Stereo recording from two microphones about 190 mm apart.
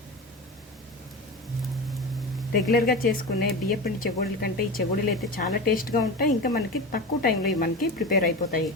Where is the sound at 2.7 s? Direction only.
50° left (ahead or behind).